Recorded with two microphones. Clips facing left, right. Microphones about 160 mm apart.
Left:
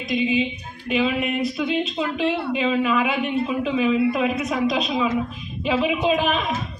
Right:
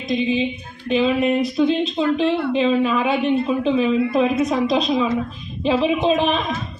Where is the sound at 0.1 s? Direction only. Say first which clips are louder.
Right 2 dB; 30° right (ahead or behind).